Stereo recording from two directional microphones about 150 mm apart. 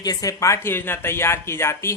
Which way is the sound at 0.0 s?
25° left (ahead or behind).